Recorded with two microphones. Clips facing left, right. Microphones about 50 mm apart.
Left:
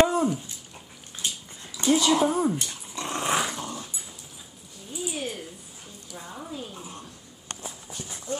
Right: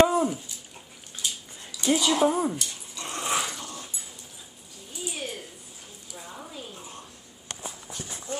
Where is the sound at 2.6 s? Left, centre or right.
Left.